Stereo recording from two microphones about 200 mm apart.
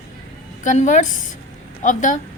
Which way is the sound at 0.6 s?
40° left (ahead or behind).